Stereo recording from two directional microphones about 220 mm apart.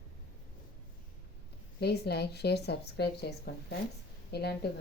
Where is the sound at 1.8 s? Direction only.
50° left (ahead or behind).